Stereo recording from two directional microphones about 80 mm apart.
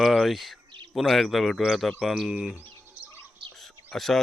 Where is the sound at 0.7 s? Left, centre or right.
Right.